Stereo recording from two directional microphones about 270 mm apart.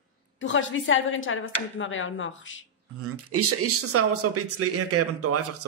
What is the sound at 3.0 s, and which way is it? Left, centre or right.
Speech, right.